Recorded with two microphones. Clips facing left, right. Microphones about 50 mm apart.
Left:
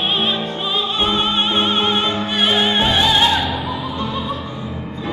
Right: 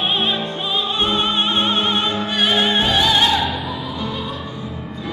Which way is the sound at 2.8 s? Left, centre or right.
Centre.